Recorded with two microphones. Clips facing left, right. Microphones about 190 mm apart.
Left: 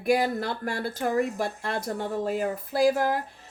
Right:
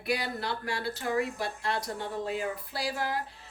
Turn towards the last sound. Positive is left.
turn(degrees=45)  # may be behind; listen again after turning